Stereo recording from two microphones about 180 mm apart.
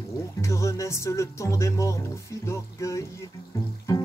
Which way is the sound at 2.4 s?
15° left (ahead or behind).